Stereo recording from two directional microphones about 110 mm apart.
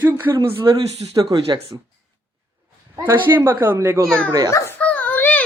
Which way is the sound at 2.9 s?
20° right (ahead or behind).